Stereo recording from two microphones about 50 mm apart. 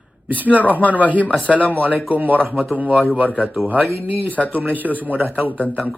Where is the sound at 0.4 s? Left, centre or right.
Left.